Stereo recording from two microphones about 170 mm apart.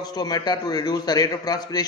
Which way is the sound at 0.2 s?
25° left (ahead or behind).